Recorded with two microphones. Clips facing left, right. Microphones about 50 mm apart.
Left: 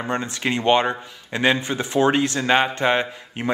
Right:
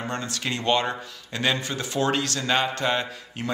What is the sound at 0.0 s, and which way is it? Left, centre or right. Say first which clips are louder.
Speech: left 5 dB; left.